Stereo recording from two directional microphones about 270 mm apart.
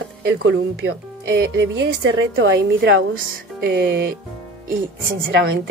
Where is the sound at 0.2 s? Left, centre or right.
Right.